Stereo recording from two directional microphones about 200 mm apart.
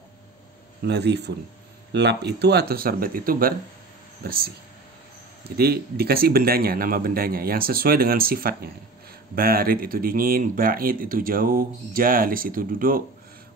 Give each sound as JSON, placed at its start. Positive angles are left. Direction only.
{"t": 0.8, "sound": "speech", "side_deg": -55}
{"t": 5.6, "sound": "speech", "side_deg": -50}